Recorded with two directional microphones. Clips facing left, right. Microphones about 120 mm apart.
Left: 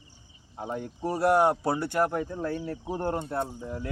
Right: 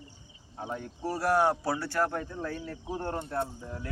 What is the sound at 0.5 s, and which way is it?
Speech, 15° left (ahead or behind).